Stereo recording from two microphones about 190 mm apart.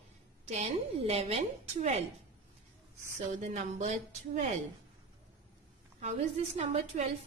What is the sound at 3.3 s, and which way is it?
A woman's voice, 40° right (ahead or behind).